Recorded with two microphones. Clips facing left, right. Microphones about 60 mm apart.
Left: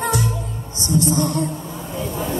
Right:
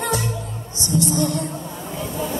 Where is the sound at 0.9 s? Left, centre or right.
Left.